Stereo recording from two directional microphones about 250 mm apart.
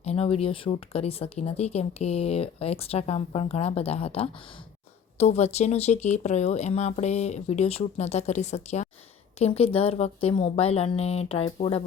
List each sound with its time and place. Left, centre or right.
0.0 s speech: left